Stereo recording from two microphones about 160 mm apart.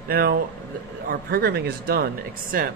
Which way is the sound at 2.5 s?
60° right (ahead or behind).